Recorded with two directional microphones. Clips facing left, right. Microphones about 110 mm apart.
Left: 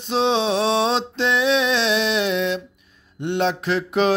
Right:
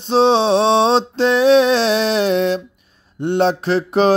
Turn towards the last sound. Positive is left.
turn(degrees=-35)  # may be behind; listen again after turning